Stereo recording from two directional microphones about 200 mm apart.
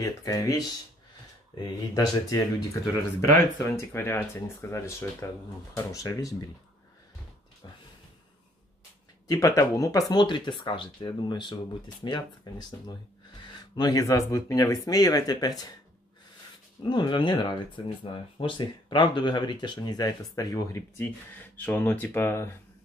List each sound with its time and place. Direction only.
0.0 s speech: 15° left (ahead or behind)
2.0 s speech: 15° left (ahead or behind)
9.3 s speech: 15° left (ahead or behind)
16.8 s speech: 20° left (ahead or behind)